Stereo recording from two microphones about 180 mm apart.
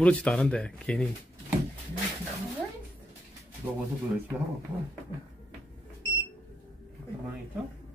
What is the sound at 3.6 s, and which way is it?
Speech, 20° right (ahead or behind).